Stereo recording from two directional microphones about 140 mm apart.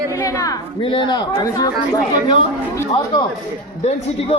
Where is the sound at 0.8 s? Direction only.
35° left (ahead or behind).